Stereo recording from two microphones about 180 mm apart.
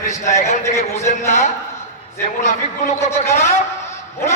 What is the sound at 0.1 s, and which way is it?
A man's voice, 40° left (ahead or behind).